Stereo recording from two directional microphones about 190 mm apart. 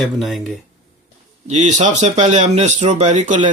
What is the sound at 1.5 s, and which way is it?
Speech, 40° right (ahead or behind).